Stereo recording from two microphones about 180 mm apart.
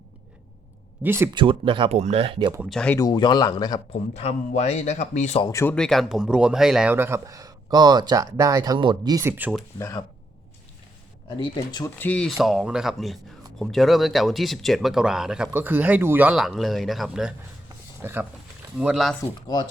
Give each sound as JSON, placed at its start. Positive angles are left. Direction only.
{"t": 1.0, "sound": "speech", "side_deg": -15}
{"t": 1.3, "sound": "speech", "side_deg": -25}
{"t": 2.6, "sound": "speech", "side_deg": 5}
{"t": 3.0, "sound": "speech", "side_deg": 25}
{"t": 4.1, "sound": "a man's voice", "side_deg": 35}
{"t": 5.4, "sound": "speech", "side_deg": 15}
{"t": 5.7, "sound": "speech", "side_deg": 5}
{"t": 9.7, "sound": "speech", "side_deg": 15}
{"t": 11.3, "sound": "speech", "side_deg": 25}
{"t": 11.9, "sound": "speech", "side_deg": 10}
{"t": 18.0, "sound": "speech", "side_deg": -10}